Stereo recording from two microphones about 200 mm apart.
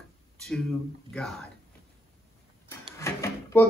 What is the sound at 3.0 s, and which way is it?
Drawer open or close, 15° left (ahead or behind).